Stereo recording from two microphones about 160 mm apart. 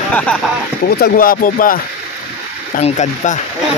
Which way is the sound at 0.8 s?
70° left (ahead or behind).